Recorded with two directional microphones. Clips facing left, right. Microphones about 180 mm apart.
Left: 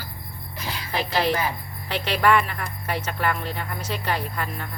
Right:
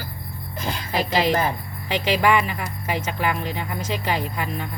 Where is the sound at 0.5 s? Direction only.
50° right (ahead or behind).